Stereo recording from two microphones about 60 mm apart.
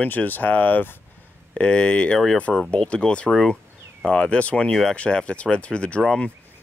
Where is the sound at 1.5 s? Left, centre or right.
Centre.